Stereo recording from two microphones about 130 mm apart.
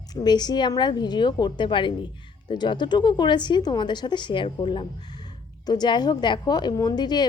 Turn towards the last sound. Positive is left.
turn(degrees=35)  # may be behind; listen again after turning